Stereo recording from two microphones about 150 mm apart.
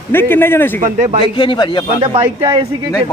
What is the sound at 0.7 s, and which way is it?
Speech, 55° right (ahead or behind).